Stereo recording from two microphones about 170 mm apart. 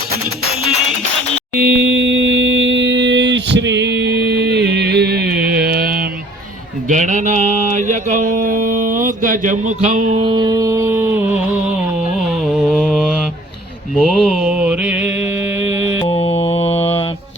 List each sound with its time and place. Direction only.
1.5 s a sound: 75° right (ahead or behind)
6.8 s mantra: 45° right (ahead or behind)
9.8 s a sound: 45° right (ahead or behind)
10.2 s music: 25° right (ahead or behind); by 11.7 s 10° right (ahead or behind)
12.5 s mantra: centre (ahead or behind)
16.0 s mantra: 35° left (ahead or behind)